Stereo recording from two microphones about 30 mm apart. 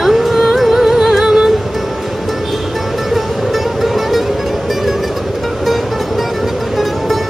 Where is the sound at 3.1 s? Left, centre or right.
Centre.